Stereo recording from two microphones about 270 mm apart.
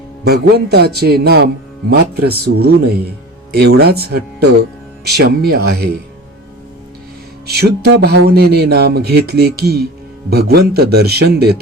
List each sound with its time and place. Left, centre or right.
0.3 s speech: right
7.4 s speech: right